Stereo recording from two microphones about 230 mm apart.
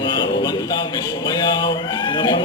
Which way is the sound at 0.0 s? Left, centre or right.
Centre.